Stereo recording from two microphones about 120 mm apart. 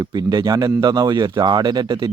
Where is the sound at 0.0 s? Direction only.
35° right (ahead or behind).